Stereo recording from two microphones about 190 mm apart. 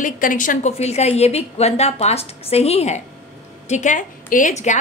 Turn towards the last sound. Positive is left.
turn(degrees=40)  # may be behind; listen again after turning